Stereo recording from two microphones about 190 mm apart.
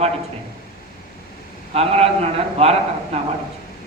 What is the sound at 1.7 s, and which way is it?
A man's voice, 35° right (ahead or behind).